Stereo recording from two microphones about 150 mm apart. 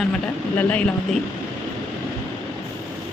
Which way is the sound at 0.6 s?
10° left (ahead or behind).